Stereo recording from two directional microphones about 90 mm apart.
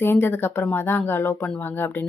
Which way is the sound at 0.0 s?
25° left (ahead or behind).